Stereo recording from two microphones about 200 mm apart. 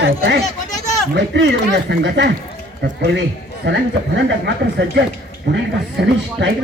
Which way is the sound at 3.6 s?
65° right (ahead or behind).